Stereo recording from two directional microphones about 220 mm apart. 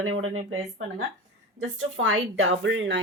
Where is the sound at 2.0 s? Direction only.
65° right (ahead or behind).